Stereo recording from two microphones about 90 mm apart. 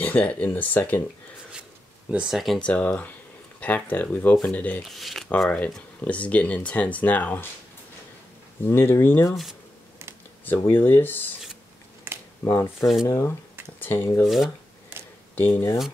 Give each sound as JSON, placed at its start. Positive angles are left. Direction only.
{"t": 0.0, "sound": "speech", "side_deg": 15}
{"t": 2.0, "sound": "speech", "side_deg": -10}
{"t": 2.3, "sound": "speech", "side_deg": 0}
{"t": 2.6, "sound": "speech", "side_deg": 15}
{"t": 4.8, "sound": "speech", "side_deg": 0}
{"t": 5.5, "sound": "speech", "side_deg": 15}
{"t": 8.6, "sound": "speech", "side_deg": 25}
{"t": 9.3, "sound": "speech", "side_deg": 0}
{"t": 10.4, "sound": "speech", "side_deg": 20}
{"t": 12.1, "sound": "a sound", "side_deg": -25}
{"t": 13.0, "sound": "speech", "side_deg": 35}
{"t": 13.7, "sound": "speech", "side_deg": 20}
{"t": 14.2, "sound": "speech", "side_deg": 0}
{"t": 15.3, "sound": "speech", "side_deg": 20}